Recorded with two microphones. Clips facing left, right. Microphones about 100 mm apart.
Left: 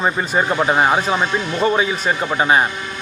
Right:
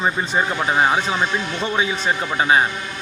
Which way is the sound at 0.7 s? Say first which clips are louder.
Left 2 dB; 10° left (ahead or behind).